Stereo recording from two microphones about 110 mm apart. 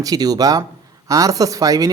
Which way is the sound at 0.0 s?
35° right (ahead or behind).